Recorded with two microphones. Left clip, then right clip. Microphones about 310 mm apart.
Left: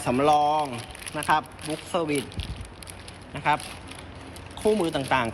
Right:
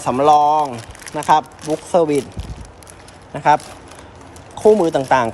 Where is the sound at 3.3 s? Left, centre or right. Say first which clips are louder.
Right 10 dB; centre.